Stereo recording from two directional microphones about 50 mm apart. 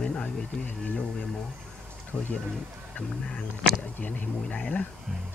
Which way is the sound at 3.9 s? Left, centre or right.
Left.